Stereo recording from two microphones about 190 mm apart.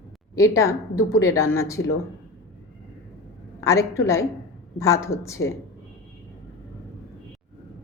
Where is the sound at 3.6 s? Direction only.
15° left (ahead or behind).